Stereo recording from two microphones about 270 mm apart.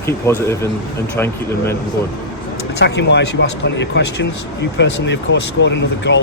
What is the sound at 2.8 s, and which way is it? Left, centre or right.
Speech, left.